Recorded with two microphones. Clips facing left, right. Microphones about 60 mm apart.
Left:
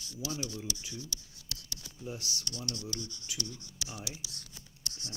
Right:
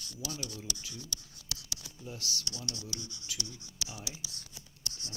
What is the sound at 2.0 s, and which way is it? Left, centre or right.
Speech, left.